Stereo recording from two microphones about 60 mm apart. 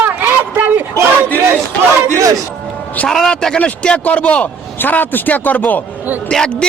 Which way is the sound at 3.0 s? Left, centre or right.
Centre.